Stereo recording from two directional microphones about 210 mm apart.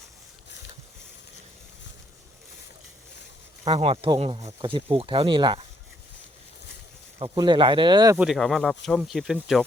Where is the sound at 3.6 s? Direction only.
30° right (ahead or behind).